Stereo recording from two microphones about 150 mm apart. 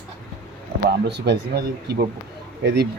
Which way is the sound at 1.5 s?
90° right.